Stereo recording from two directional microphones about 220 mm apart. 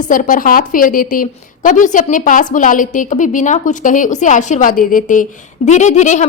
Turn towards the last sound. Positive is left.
turn(degrees=35)  # may be behind; listen again after turning